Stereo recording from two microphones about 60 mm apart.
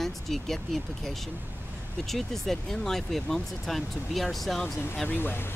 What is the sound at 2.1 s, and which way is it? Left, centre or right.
Speech, centre.